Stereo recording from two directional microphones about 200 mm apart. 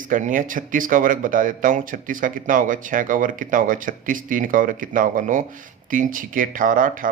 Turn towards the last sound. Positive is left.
turn(degrees=-45)  # may be behind; listen again after turning